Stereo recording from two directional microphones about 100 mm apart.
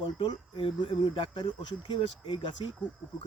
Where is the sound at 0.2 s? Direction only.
55° left (ahead or behind).